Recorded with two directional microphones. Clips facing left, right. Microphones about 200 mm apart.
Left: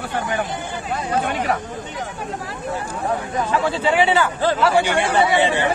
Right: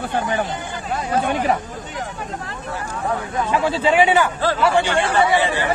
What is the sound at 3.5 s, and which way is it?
Speech, 15° right (ahead or behind).